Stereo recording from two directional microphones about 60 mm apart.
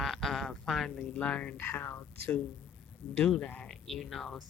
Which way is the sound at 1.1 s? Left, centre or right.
Left.